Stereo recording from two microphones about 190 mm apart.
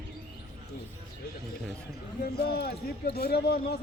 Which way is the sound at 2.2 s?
55° left (ahead or behind).